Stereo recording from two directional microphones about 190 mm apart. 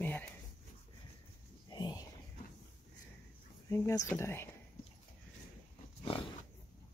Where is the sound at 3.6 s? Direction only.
15° left (ahead or behind).